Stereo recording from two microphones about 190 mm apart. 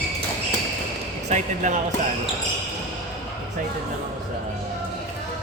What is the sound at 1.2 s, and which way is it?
Speech, 40° right (ahead or behind).